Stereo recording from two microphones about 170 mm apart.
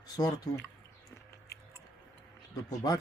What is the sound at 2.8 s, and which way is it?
Speech, 25° left (ahead or behind).